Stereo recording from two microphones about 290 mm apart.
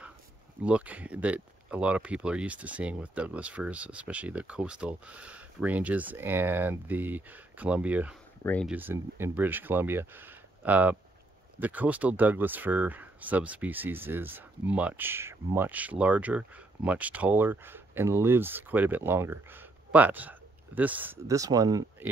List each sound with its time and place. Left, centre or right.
0.6 s speech: centre
8.7 s speech: centre